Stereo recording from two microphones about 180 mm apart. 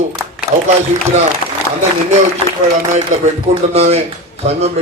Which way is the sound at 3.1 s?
45° right (ahead or behind).